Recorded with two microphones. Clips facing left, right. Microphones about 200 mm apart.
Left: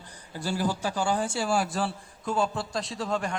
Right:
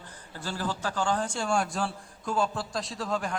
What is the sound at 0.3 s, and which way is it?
A man's voice, 10° left (ahead or behind).